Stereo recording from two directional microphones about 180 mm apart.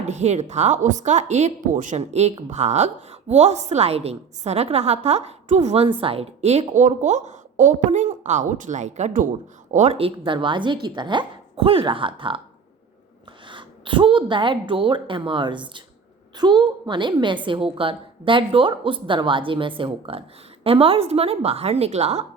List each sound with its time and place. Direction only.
0.1 s a woman's voice: 40° right (ahead or behind)
13.5 s a woman's voice: 25° right (ahead or behind)